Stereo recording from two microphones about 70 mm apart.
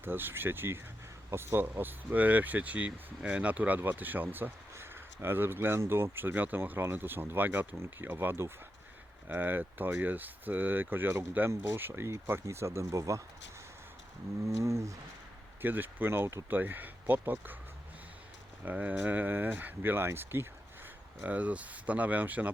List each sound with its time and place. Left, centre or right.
0.0 s speech: right
14.4 s a sound: right
15.6 s speech: right
18.6 s speech: right
21.2 s speech: right